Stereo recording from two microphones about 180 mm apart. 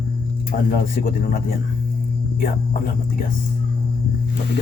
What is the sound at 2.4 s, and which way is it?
Speech, 50° left (ahead or behind).